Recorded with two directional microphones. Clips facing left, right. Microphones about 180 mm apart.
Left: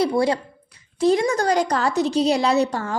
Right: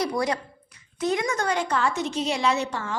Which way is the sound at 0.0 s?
30° left (ahead or behind).